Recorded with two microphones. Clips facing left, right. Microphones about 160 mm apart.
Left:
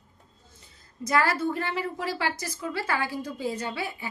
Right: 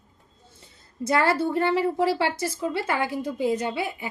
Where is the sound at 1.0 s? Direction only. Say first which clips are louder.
Right 3 dB; 25° right (ahead or behind).